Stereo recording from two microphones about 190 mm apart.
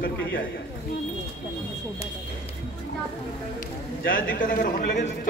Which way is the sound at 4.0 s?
50° left (ahead or behind).